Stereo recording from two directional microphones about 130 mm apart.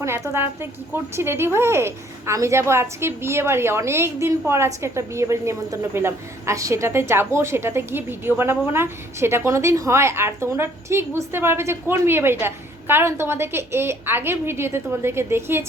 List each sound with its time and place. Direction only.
0.0 s a woman's voice: 20° right (ahead or behind)